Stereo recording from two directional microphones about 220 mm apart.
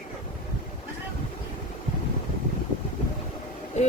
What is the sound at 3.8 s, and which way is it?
Vehicle, 30° left (ahead or behind).